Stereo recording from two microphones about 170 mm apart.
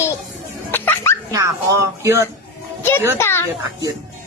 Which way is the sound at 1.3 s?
20° right (ahead or behind).